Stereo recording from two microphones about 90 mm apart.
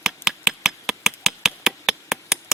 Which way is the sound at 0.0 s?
5° right (ahead or behind).